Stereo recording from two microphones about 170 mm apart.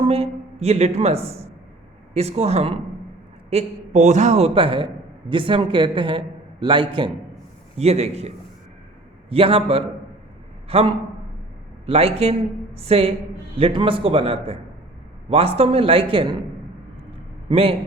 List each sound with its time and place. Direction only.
0.6 s a man's voice: 40° right (ahead or behind)
9.3 s a man's voice: 35° right (ahead or behind)
17.5 s a man's voice: 35° right (ahead or behind)